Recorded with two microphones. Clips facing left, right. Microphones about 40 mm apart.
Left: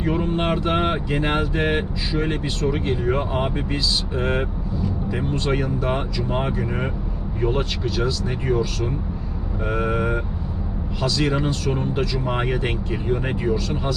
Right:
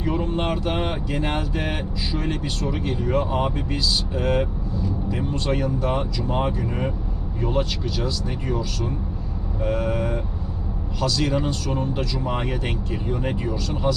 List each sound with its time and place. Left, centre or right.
0.0 s speech: left